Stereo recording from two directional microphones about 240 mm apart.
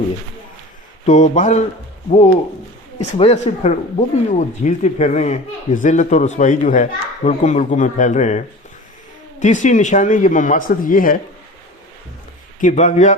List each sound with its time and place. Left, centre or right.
1.0 s speech: left
12.5 s speech: left